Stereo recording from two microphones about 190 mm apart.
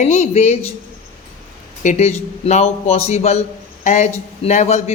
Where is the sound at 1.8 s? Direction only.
35° left (ahead or behind).